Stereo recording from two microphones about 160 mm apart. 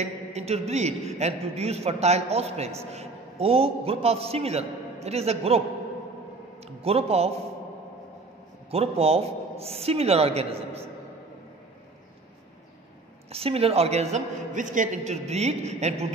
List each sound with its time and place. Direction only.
0.0 s a woman's voice: 45° right (ahead or behind)
6.6 s a man's voice: 40° right (ahead or behind)
8.6 s a man's voice: 40° right (ahead or behind)
13.3 s a woman's voice: 35° right (ahead or behind)